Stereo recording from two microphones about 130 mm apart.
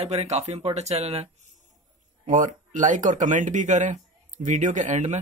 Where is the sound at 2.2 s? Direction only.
90° right.